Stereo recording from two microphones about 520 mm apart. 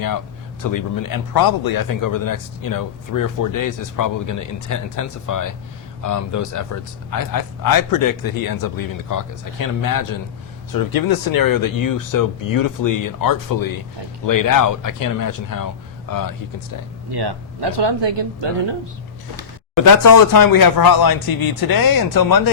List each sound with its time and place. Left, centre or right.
0.6 s a man's voice: left
17.1 s speech: right
19.7 s a man's voice: left